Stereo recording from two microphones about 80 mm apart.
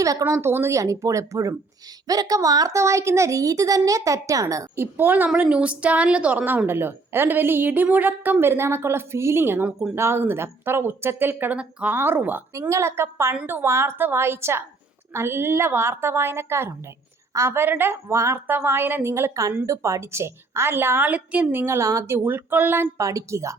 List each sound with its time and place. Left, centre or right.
0.0 s a woman's voice: right
4.8 s a woman's voice: right
12.5 s a woman's voice: right
23.0 s a woman's voice: right